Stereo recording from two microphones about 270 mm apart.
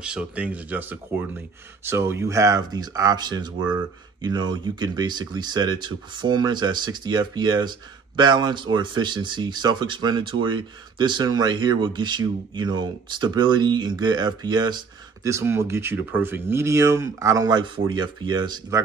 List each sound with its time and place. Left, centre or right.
0.0 s speech: centre